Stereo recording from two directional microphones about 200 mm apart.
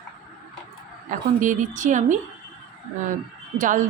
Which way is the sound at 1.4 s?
40° right (ahead or behind).